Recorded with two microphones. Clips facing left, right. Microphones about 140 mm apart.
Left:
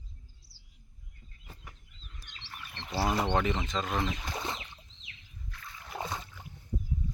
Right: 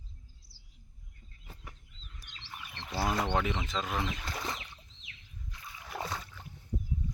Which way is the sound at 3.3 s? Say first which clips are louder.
Left 2 dB; 5° right (ahead or behind).